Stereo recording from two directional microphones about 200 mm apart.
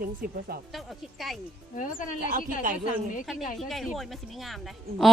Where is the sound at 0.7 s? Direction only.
Centre (ahead or behind).